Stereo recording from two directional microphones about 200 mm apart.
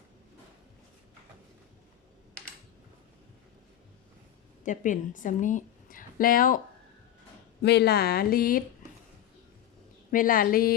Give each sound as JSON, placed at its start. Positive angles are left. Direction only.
{"t": 4.6, "sound": "a woman's voice", "side_deg": 40}
{"t": 7.6, "sound": "speech", "side_deg": 55}
{"t": 10.1, "sound": "speech", "side_deg": 45}